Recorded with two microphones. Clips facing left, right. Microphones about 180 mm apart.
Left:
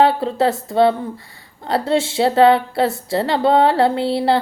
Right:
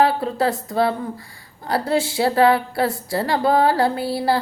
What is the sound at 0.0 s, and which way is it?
Speech, 25° left (ahead or behind).